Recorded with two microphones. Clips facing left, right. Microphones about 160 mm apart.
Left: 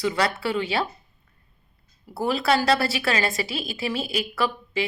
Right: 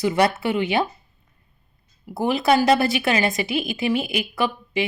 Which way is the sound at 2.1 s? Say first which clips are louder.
Right 3 dB; 15° right (ahead or behind).